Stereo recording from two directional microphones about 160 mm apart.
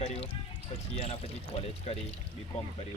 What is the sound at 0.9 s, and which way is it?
Speech, 40° left (ahead or behind).